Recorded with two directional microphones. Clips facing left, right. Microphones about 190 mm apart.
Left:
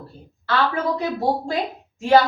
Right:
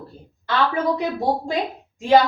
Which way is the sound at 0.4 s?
15° right (ahead or behind).